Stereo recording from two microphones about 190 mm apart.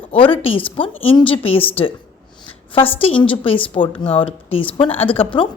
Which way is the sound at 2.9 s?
30° left (ahead or behind).